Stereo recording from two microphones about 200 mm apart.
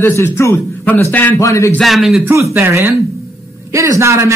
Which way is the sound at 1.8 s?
Centre (ahead or behind).